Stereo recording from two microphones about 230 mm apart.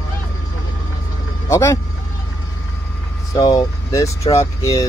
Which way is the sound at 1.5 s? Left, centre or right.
Centre.